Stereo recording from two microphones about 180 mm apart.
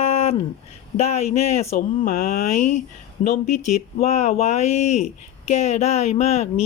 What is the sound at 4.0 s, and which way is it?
Speech, 40° left (ahead or behind).